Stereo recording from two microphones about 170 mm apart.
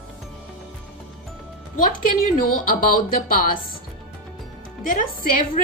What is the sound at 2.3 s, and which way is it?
Speech, 55° left (ahead or behind).